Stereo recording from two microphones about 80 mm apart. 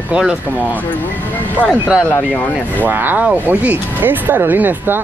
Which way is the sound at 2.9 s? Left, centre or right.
Right.